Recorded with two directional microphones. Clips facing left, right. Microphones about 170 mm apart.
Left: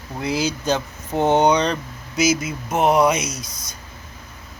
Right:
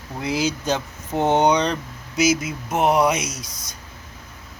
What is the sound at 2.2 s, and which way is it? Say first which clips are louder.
Speech: even; 60° right (ahead or behind).